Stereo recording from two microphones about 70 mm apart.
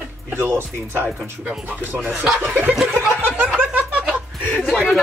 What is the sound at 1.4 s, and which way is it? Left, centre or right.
Speech, centre.